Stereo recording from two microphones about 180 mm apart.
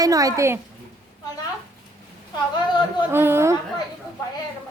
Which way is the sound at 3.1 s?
15° right (ahead or behind).